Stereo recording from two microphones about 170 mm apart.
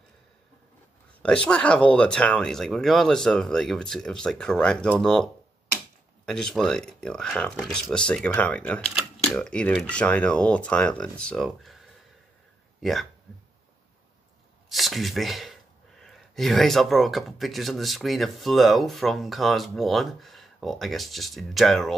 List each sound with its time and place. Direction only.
1.2 s speech: 5° left (ahead or behind)
14.7 s speech: centre (ahead or behind)